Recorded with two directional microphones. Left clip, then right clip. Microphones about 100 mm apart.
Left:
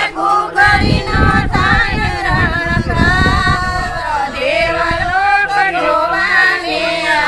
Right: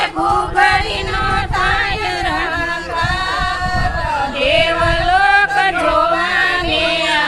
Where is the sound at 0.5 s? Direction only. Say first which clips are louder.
Left 2 dB; 35° right (ahead or behind).